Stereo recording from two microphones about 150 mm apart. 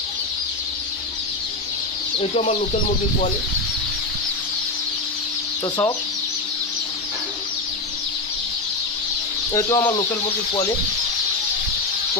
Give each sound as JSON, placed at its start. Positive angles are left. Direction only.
{"t": 2.1, "sound": "speech", "side_deg": 45}
{"t": 9.5, "sound": "speech", "side_deg": 20}